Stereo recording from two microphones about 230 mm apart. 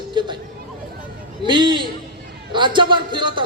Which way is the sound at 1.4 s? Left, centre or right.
Centre.